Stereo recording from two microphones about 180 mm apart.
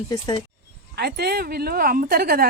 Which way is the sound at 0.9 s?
65° right (ahead or behind).